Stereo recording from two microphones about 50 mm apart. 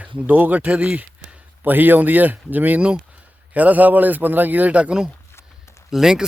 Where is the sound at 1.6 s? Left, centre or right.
Right; by 6.2 s centre.